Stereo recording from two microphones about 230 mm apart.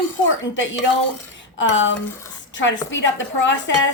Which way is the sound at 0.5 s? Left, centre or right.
Left.